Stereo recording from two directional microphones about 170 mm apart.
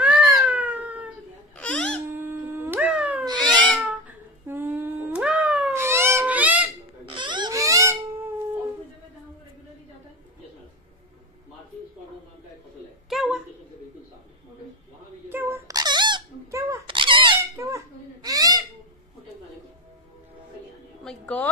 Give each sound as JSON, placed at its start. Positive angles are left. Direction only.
{"t": 0.0, "sound": "cat", "side_deg": -10}
{"t": 1.6, "sound": "babbling", "side_deg": 5}
{"t": 2.0, "sound": "dog", "side_deg": -15}
{"t": 3.4, "sound": "cat", "side_deg": 10}
{"t": 3.8, "sound": "cat", "side_deg": -10}
{"t": 7.1, "sound": "a sound", "side_deg": -25}
{"t": 13.1, "sound": "a sound", "side_deg": 0}
{"t": 15.2, "sound": "wail", "side_deg": -10}
{"t": 15.7, "sound": "squeak", "side_deg": -25}
{"t": 16.8, "sound": "squeak", "side_deg": -30}
{"t": 17.4, "sound": "babbling", "side_deg": -20}
{"t": 21.0, "sound": "a sound", "side_deg": 5}